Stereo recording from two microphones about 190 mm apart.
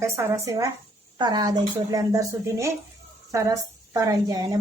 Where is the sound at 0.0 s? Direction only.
15° right (ahead or behind).